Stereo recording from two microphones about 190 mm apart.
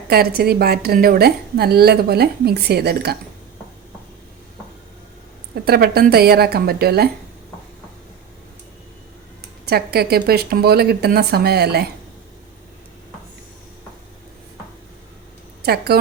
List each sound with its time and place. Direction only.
0.1 s a woman's voice: 55° right (ahead or behind)
5.6 s a woman's voice: 55° right (ahead or behind)
9.6 s a woman's voice: 55° right (ahead or behind)
15.6 s a woman's voice: 55° right (ahead or behind)